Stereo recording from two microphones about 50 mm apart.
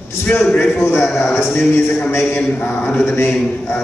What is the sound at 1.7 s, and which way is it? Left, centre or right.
A man's voice, left.